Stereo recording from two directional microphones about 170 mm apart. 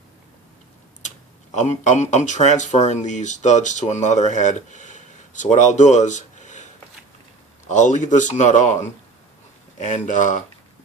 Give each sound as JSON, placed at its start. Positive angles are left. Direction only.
{"t": 1.5, "sound": "speech", "side_deg": 45}
{"t": 7.7, "sound": "speech", "side_deg": 45}